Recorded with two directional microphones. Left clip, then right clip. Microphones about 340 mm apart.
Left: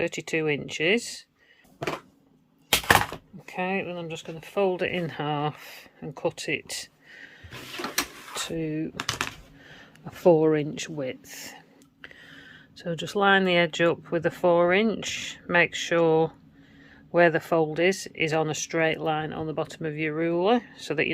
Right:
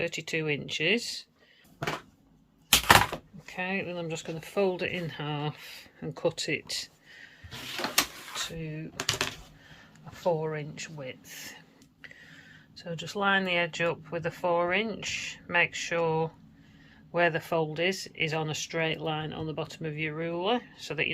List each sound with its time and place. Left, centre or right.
0.0 s speech: centre
1.8 s a sound: left
3.4 s speech: centre
8.3 s speech: centre